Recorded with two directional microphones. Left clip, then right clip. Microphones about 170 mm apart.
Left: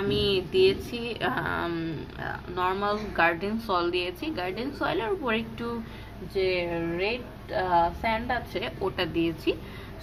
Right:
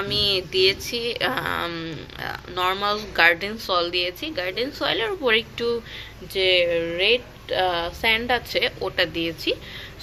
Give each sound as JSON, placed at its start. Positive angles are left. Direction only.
{"t": 0.1, "sound": "speech", "side_deg": -15}
{"t": 6.3, "sound": "a woman's voice", "side_deg": -25}
{"t": 8.8, "sound": "speech", "side_deg": -10}